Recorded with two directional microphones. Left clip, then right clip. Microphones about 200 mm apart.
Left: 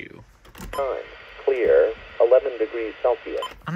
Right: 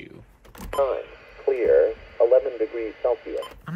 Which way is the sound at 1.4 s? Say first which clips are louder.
Left 1 dB; 20° left (ahead or behind).